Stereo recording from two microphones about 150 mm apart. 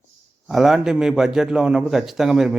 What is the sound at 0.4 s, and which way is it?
Speech, centre (ahead or behind).